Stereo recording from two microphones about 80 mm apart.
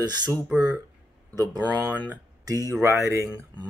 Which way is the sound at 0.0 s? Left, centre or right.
Right.